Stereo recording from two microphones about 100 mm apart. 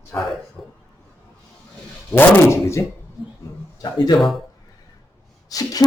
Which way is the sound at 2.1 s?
25° left (ahead or behind).